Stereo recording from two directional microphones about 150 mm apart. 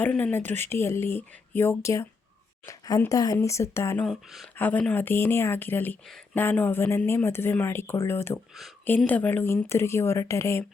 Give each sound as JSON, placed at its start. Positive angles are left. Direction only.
{"t": 0.0, "sound": "speech", "side_deg": 10}
{"t": 4.0, "sound": "speech", "side_deg": 0}
{"t": 4.5, "sound": "speech", "side_deg": 10}